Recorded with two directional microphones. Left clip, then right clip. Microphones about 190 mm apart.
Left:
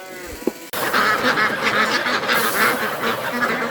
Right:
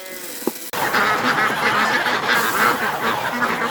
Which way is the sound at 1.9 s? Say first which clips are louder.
Right 1 dB; 30° left (ahead or behind).